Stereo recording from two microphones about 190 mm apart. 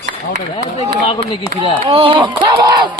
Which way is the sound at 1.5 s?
15° left (ahead or behind).